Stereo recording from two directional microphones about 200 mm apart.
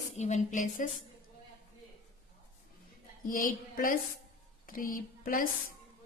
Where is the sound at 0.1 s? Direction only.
35° left (ahead or behind).